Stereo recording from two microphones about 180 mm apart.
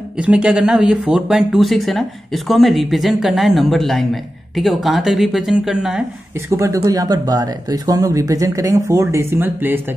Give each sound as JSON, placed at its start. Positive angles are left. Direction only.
{"t": 0.2, "sound": "speech", "side_deg": -5}
{"t": 6.5, "sound": "speech", "side_deg": -15}